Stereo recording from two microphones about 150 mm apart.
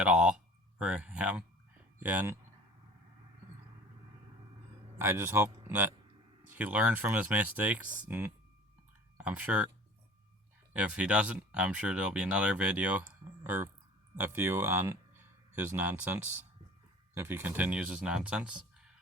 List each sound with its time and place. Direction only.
0.0 s a sound: 5° right (ahead or behind)
0.8 s speech: 5° right (ahead or behind)
4.9 s speech: 20° right (ahead or behind)
10.8 s speech: 5° right (ahead or behind)